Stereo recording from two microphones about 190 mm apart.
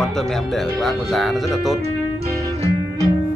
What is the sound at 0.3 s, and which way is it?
A man's voice, centre (ahead or behind).